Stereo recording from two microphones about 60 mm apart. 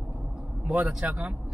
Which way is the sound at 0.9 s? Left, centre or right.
Centre.